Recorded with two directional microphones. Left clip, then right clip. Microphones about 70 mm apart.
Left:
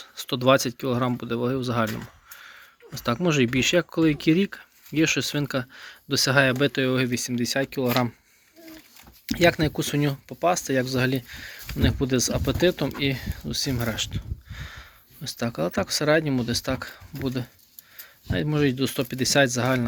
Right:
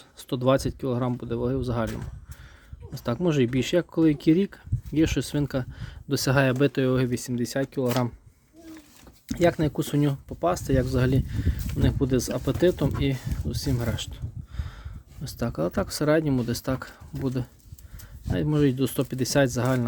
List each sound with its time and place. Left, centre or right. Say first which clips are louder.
0.0 s speech: left 3 dB; right
9.2 s speech: left 2 dB; right
13.1 s speech: left 6 dB; right
13.9 s a sound: left 6 dB; right
15.2 s speech: left 1 dB; right